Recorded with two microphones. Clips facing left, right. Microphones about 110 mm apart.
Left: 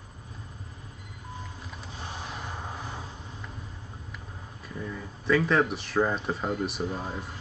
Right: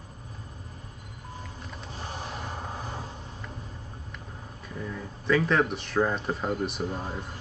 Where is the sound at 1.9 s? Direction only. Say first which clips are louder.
Right 2 dB; 40° right (ahead or behind).